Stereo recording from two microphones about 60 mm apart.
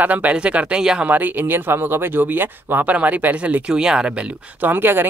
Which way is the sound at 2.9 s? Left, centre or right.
Right.